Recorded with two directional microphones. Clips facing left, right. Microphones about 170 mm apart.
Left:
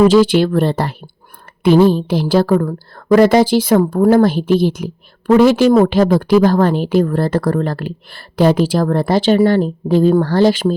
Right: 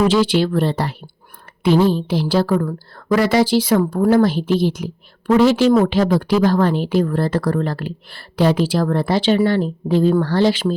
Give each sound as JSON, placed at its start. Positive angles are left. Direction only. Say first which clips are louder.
{"t": 0.1, "sound": "a woman's voice", "louder": "left 5 dB", "side_deg": 45}